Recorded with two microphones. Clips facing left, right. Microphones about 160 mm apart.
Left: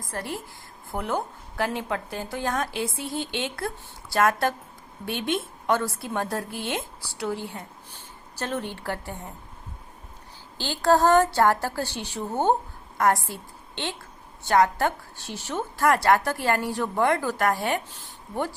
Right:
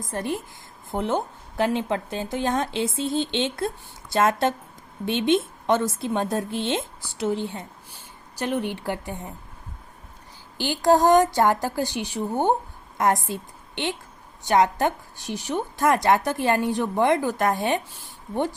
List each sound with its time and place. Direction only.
0.0 s a woman's voice: 20° right (ahead or behind)
10.6 s a woman's voice: 15° right (ahead or behind)